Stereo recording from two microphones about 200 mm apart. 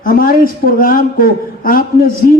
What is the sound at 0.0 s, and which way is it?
Speech, 45° left (ahead or behind).